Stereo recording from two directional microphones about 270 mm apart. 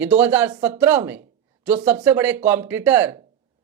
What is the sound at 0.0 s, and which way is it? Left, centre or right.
A man's voice, centre.